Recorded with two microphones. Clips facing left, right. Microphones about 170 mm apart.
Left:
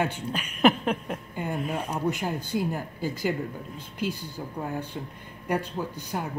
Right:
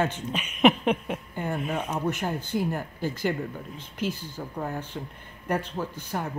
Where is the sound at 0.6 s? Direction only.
5° right (ahead or behind).